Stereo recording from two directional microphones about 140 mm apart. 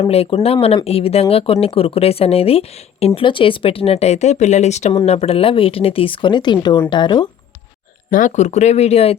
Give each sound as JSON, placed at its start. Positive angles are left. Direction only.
{"t": 0.1, "sound": "speech", "side_deg": 45}
{"t": 8.1, "sound": "speech", "side_deg": 60}